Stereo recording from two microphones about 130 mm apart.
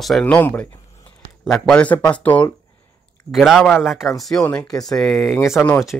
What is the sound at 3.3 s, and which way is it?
Speech, centre (ahead or behind).